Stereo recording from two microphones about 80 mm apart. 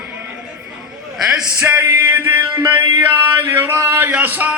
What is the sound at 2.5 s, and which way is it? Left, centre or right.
Music, right.